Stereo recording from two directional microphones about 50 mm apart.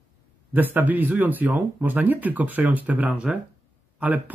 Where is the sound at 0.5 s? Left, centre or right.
Right.